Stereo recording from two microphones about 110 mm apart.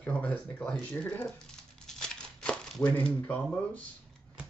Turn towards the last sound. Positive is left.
turn(degrees=15)  # may be behind; listen again after turning